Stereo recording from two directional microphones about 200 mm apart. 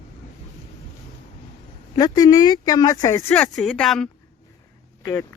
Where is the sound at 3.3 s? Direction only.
5° left (ahead or behind).